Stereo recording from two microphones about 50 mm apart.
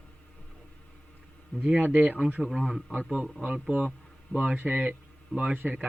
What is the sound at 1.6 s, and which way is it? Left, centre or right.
Speech, right.